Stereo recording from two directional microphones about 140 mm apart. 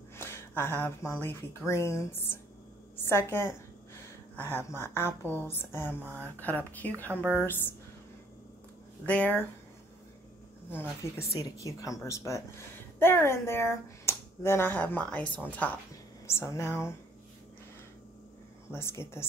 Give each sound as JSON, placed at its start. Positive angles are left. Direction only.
{"t": 0.2, "sound": "a woman's voice", "side_deg": 15}
{"t": 6.0, "sound": "a woman's voice", "side_deg": -15}
{"t": 6.4, "sound": "a woman's voice", "side_deg": 10}
{"t": 7.1, "sound": "a woman's voice", "side_deg": -15}
{"t": 9.0, "sound": "a woman's voice", "side_deg": 10}
{"t": 10.7, "sound": "a woman's voice", "side_deg": 15}
{"t": 18.7, "sound": "a woman's voice", "side_deg": 20}